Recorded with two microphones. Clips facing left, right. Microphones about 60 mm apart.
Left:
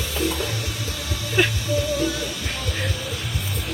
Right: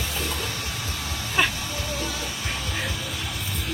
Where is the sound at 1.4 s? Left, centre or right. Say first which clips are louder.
Left 2 dB; centre.